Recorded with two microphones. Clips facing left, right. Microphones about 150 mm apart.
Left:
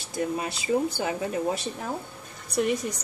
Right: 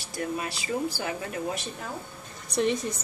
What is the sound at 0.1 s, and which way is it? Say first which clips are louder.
Speech: left 3 dB; 20° left (ahead or behind).